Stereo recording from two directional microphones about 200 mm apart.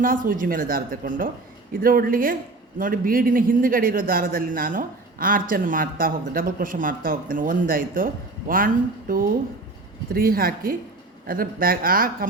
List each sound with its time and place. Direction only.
0.0 s a man's voice: 45° right (ahead or behind)